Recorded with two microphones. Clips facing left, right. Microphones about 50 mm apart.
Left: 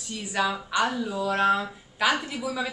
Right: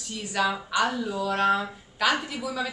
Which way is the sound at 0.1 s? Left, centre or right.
Centre.